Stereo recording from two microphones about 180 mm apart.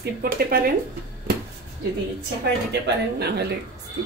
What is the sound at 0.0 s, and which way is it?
Speech, 55° right (ahead or behind).